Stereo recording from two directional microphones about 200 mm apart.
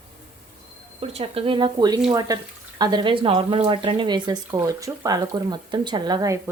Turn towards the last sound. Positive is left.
turn(degrees=-20)  # may be behind; listen again after turning